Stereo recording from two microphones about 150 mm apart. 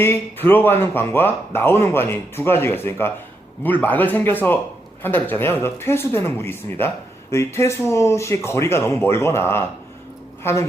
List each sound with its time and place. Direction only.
0.0 s a woman's voice: 15° left (ahead or behind)